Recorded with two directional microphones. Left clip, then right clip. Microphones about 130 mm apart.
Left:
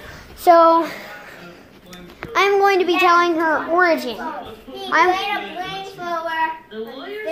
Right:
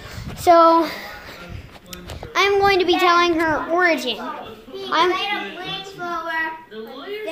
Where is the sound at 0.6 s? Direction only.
15° right (ahead or behind).